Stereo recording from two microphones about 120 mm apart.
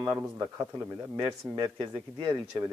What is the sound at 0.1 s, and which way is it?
Speech, 20° right (ahead or behind).